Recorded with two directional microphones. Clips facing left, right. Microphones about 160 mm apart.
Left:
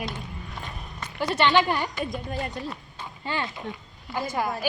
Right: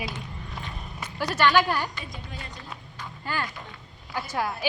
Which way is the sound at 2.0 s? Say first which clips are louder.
Left 10 dB; 55° left (ahead or behind).